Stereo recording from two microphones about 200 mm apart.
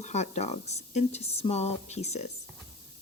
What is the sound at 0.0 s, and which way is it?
Speech, 35° left (ahead or behind).